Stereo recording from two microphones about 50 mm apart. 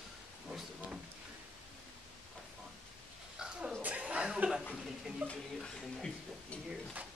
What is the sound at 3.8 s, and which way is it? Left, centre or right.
Chuckle, right.